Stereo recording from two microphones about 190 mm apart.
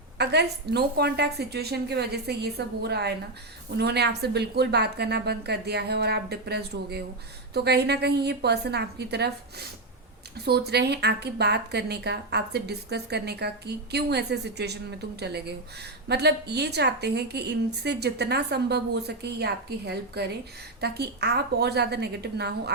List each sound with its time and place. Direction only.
0.2 s a woman's voice: 60° right (ahead or behind)